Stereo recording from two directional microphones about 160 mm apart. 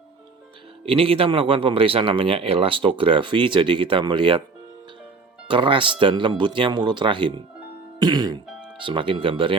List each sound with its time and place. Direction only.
0.9 s speech: 35° right (ahead or behind)
5.5 s speech: 30° right (ahead or behind)
7.9 s music: 25° right (ahead or behind)
8.8 s speech: 30° right (ahead or behind)